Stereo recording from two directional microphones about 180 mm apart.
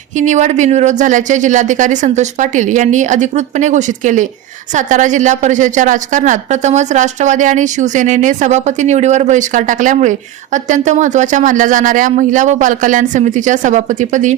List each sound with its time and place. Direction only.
0.2 s a woman's voice: 40° right (ahead or behind)